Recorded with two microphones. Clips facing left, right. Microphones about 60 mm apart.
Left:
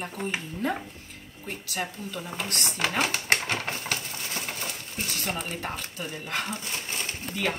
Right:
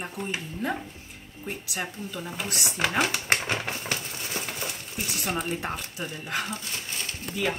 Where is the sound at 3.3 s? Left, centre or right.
Right.